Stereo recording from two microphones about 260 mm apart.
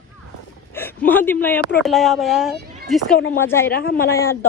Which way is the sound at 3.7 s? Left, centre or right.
Left.